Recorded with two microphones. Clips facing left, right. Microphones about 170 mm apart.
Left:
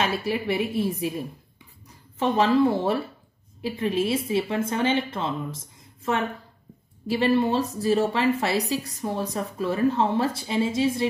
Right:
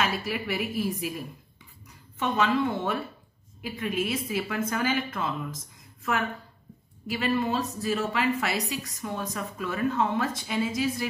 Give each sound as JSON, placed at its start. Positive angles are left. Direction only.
{"t": 0.0, "sound": "a woman's voice", "side_deg": 30}